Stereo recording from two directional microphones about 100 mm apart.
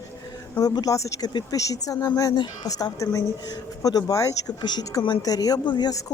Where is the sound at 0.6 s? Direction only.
40° left (ahead or behind).